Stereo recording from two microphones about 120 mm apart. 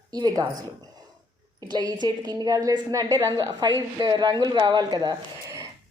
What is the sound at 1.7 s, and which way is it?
A woman's voice, 35° right (ahead or behind).